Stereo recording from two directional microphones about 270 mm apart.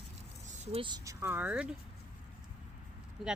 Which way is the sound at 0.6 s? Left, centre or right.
Centre.